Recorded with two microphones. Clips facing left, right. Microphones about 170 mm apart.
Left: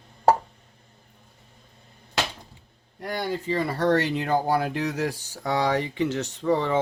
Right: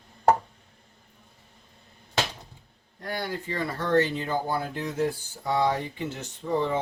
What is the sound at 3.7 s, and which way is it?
Speech, 70° left (ahead or behind).